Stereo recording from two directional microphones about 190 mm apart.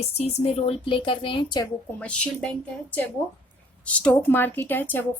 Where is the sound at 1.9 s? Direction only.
5° left (ahead or behind).